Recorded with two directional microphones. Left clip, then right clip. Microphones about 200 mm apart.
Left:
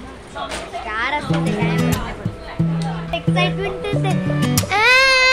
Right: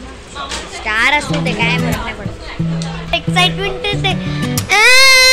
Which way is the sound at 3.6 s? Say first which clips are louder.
Right 5 dB; 10° left (ahead or behind).